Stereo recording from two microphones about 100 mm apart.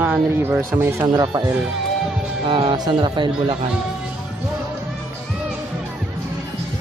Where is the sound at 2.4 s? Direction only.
55° right (ahead or behind).